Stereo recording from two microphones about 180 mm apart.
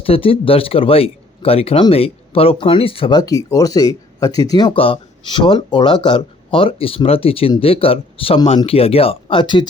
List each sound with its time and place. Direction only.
0.0 s speech: 30° left (ahead or behind)